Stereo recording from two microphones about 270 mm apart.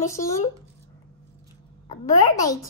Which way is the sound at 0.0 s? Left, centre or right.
Centre.